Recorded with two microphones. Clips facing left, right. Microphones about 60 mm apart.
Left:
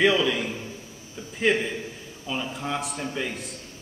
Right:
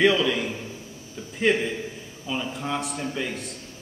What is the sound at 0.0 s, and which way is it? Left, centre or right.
Speech, centre.